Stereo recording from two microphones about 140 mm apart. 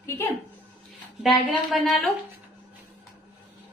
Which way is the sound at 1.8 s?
Centre (ahead or behind).